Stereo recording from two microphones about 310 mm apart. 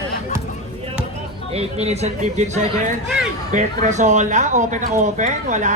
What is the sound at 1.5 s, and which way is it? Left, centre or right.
Speech, right.